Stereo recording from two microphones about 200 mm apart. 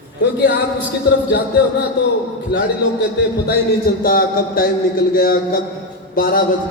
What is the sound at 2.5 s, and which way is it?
Speech, 55° left (ahead or behind).